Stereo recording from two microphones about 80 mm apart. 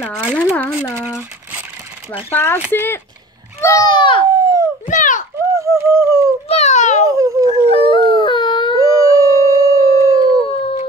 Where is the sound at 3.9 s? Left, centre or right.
Left.